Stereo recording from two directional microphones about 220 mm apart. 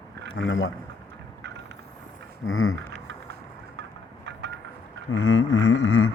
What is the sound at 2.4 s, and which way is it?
Speech, 65° left (ahead or behind).